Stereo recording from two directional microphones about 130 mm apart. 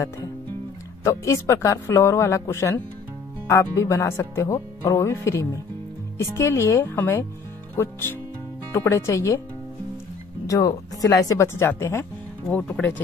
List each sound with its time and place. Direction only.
1.0 s speech: 25° left (ahead or behind)
10.4 s speech: 25° left (ahead or behind)